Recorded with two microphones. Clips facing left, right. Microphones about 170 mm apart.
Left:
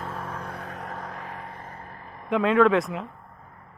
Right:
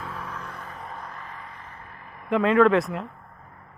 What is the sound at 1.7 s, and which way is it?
Vehicle, 35° left (ahead or behind).